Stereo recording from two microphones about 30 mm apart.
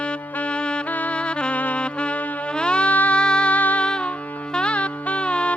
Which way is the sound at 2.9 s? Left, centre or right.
Left.